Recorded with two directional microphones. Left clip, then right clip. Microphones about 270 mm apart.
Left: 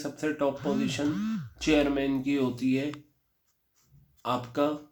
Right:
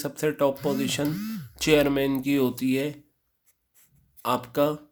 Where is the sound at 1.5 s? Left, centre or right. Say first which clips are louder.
Right 4 dB; right.